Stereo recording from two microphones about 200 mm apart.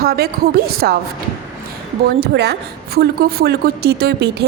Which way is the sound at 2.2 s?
55° right (ahead or behind).